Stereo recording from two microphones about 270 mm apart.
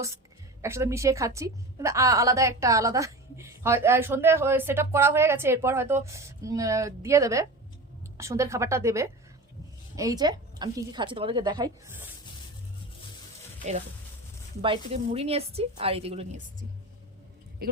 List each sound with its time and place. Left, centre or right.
0.6 s a woman's voice: centre
14.6 s speech: centre
17.6 s speech: right